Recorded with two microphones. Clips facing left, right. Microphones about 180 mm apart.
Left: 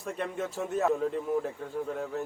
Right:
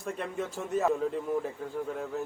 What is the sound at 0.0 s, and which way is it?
Speech, centre (ahead or behind).